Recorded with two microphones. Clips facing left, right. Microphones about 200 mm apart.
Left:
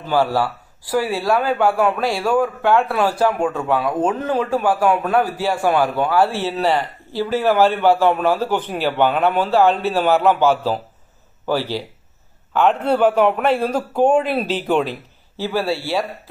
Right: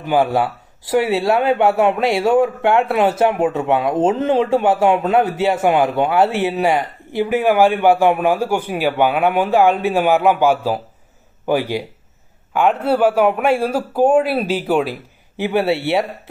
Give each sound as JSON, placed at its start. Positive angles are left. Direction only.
{"t": 0.0, "sound": "a man's voice", "side_deg": -20}